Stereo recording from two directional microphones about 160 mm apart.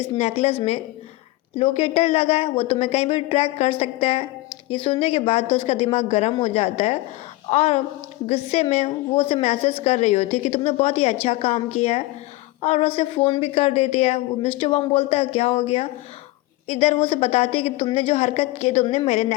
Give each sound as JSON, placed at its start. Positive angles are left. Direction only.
{"t": 0.0, "sound": "a woman's voice", "side_deg": 40}